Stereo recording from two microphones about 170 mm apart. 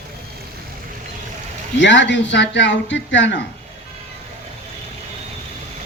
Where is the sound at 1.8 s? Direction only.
90° left.